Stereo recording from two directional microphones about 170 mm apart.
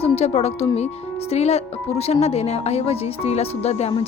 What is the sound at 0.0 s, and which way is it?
A woman's voice, 40° left (ahead or behind).